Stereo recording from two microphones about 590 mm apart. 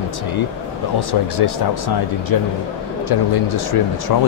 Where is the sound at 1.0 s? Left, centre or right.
Left.